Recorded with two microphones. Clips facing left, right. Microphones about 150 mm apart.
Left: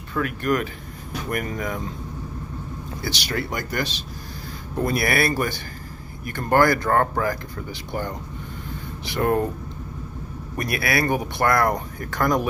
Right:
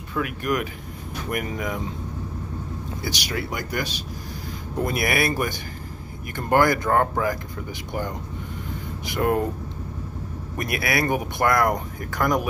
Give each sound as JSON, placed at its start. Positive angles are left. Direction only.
{"t": 0.1, "sound": "speech", "side_deg": -10}
{"t": 3.3, "sound": "speech", "side_deg": -10}
{"t": 9.0, "sound": "speech", "side_deg": -15}
{"t": 10.6, "sound": "speech", "side_deg": -20}